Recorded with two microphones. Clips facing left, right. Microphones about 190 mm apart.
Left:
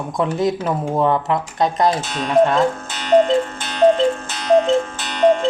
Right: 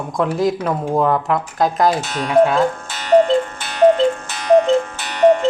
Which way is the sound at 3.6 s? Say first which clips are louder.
Right 2 dB; 10° right (ahead or behind).